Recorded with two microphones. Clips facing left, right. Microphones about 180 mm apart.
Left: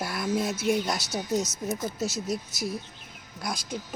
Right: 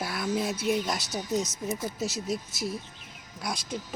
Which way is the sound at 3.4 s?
Centre (ahead or behind).